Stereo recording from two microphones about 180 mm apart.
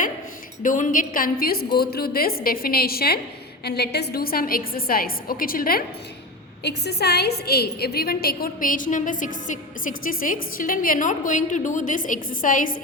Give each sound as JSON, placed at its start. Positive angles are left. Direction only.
{"t": 0.6, "sound": "a woman's voice", "side_deg": 45}
{"t": 6.6, "sound": "a woman's voice", "side_deg": 65}